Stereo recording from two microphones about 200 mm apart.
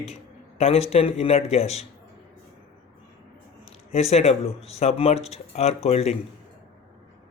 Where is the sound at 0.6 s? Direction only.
30° left (ahead or behind).